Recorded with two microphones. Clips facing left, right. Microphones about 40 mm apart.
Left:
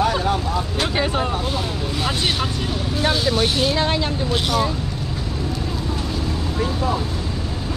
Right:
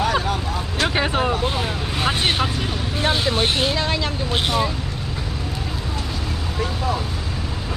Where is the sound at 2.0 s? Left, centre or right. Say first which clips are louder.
Right 3 dB; right.